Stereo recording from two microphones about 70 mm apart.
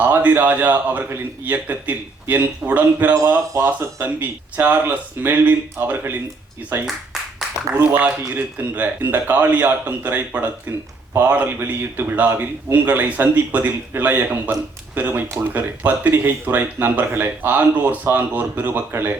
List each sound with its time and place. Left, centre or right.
0.0 s speech: right
3.2 s speech: right
3.8 s speech: right
6.8 s a sound: centre
7.7 s speech: right